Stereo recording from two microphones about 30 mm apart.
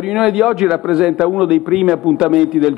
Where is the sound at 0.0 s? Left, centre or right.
Centre.